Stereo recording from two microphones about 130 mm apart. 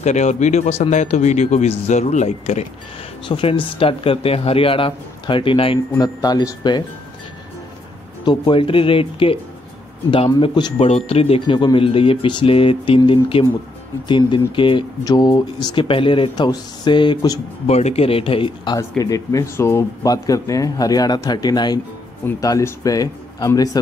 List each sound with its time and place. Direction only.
0.0 s speech: 60° left (ahead or behind)
3.3 s speech: 40° left (ahead or behind)
5.9 s speech: 30° left (ahead or behind)
8.3 s speech: 40° left (ahead or behind)
10.8 s speech: 50° left (ahead or behind); by 17.4 s 35° left (ahead or behind)
17.6 s speech: 55° left (ahead or behind); by 18.8 s 40° left (ahead or behind)
18.8 s speech: 25° left (ahead or behind)